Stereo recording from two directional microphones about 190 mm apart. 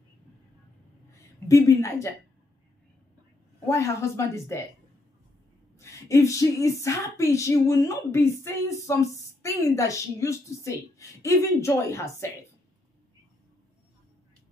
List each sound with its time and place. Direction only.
1.5 s a woman's voice: 15° left (ahead or behind)
3.6 s a woman's voice: 15° left (ahead or behind)
5.8 s a woman's voice: 15° left (ahead or behind)